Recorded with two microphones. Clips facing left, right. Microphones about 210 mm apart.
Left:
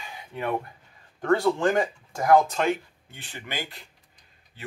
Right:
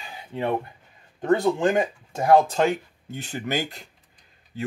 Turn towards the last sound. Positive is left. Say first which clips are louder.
# right 8 dB
turn(degrees=-45)  # may be behind; listen again after turning